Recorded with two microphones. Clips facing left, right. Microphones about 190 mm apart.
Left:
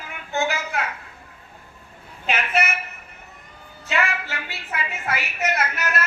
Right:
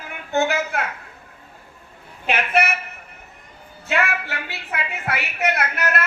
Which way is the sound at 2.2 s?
60° right (ahead or behind).